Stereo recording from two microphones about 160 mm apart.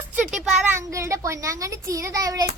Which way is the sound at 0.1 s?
10° right (ahead or behind).